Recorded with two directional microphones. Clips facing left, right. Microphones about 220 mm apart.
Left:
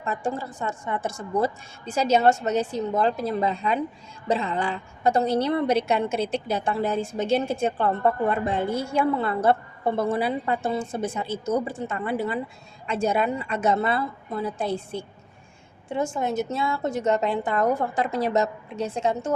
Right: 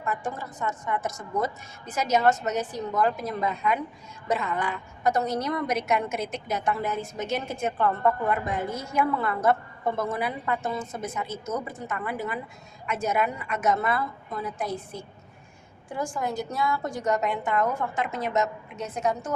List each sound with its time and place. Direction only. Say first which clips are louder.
0.0 s a woman's voice: left 3 dB; 25° left (ahead or behind)